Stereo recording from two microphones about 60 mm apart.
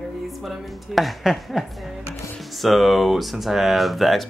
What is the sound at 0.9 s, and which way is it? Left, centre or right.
Speech, centre.